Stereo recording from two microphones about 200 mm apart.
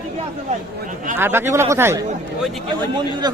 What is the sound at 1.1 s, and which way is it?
A man's voice, 10° right (ahead or behind).